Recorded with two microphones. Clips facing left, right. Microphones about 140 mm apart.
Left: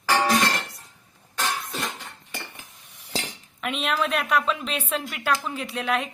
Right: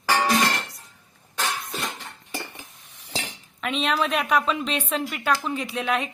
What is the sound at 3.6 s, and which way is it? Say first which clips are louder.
A woman's voice: right 2 dB; 5° left (ahead or behind).